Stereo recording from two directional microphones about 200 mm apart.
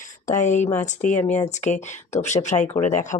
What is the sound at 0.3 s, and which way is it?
Speech, 40° left (ahead or behind).